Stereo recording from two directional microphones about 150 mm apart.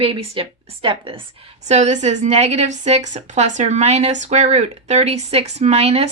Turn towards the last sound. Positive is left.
turn(degrees=-40)  # may be behind; listen again after turning